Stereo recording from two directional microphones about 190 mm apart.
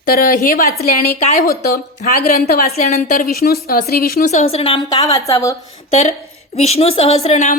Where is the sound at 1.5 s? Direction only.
50° left (ahead or behind).